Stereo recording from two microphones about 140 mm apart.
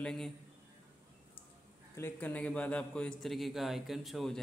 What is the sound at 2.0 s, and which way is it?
A man's voice, 15° left (ahead or behind).